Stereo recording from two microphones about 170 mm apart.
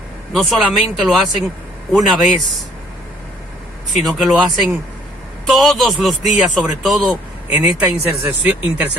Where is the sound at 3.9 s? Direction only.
Centre (ahead or behind).